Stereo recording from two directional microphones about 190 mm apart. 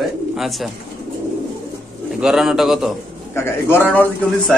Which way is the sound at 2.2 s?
Centre (ahead or behind).